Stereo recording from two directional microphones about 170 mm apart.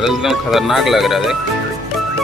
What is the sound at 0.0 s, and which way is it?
Speech, centre (ahead or behind).